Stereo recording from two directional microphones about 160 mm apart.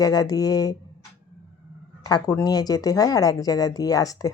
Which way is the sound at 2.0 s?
25° left (ahead or behind).